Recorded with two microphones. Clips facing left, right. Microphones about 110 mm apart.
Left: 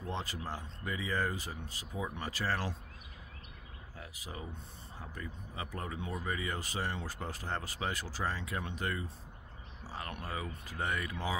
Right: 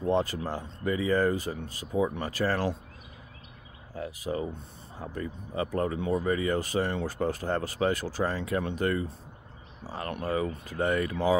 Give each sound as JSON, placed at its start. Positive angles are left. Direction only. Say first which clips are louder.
{"t": 0.1, "sound": "speech", "louder": "right 12 dB", "side_deg": -50}
{"t": 4.2, "sound": "speech", "louder": "right 13 dB", "side_deg": -55}